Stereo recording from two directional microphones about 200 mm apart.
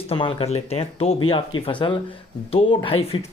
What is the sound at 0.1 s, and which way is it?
Speech, 25° left (ahead or behind).